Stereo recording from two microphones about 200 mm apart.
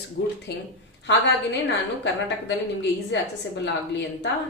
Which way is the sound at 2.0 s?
60° left (ahead or behind).